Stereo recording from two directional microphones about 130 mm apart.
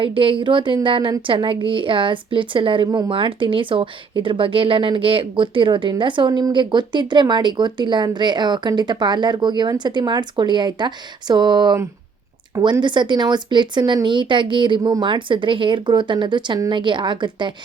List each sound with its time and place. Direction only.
0.0 s speech: 40° right (ahead or behind)
12.8 s speech: 35° right (ahead or behind)